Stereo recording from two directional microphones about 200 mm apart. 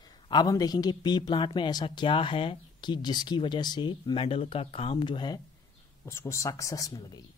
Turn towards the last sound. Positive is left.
turn(degrees=15)  # may be behind; listen again after turning